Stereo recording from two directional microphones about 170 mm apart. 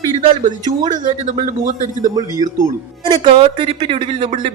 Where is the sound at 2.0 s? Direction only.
25° right (ahead or behind).